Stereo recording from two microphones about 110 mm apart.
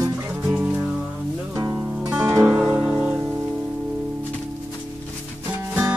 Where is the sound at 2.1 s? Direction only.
20° right (ahead or behind).